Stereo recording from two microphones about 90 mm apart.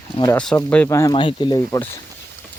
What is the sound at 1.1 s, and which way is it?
Speech, 60° left (ahead or behind).